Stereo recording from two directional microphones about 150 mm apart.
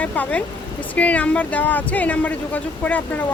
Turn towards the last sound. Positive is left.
turn(degrees=10)  # may be behind; listen again after turning